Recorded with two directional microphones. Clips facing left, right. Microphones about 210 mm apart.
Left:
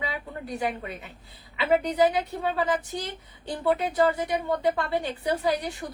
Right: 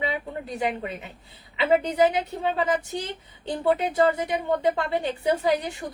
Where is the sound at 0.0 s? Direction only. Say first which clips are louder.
Right 4 dB; 25° right (ahead or behind).